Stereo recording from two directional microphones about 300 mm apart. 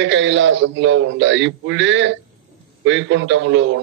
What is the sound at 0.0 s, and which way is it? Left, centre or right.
Speech, right.